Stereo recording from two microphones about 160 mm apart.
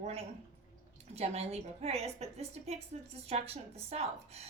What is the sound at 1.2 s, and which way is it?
A woman's voice, 40° right (ahead or behind).